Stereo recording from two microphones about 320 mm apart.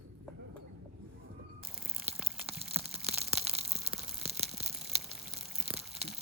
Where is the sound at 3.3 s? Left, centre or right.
Centre.